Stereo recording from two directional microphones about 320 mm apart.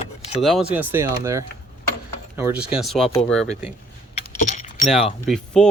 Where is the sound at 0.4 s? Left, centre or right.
Centre.